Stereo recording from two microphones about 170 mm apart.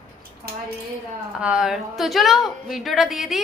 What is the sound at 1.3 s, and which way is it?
A woman's voice, 5° right (ahead or behind).